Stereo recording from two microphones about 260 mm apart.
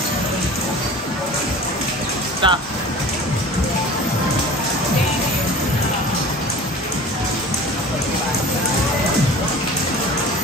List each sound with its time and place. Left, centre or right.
2.4 s speech: centre